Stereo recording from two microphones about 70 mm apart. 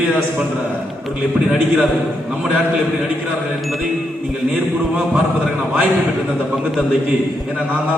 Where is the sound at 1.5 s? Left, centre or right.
Centre.